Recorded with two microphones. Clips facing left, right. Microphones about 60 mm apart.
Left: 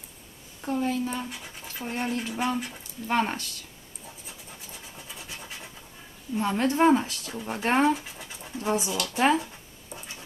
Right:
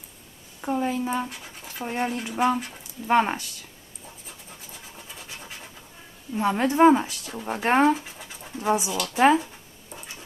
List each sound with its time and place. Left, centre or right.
0.6 s speech: centre
4.3 s scratch: centre
6.3 s speech: centre
7.9 s dog: centre
8.6 s speech: centre